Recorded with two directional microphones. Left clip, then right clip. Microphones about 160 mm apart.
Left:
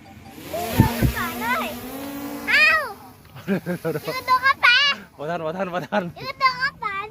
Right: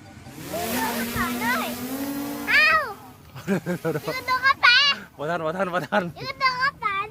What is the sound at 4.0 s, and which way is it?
Children playing, 45° left (ahead or behind).